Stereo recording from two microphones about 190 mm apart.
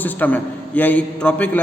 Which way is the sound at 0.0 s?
10° left (ahead or behind).